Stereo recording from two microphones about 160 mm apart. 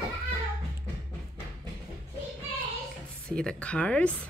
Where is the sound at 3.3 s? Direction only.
5° left (ahead or behind).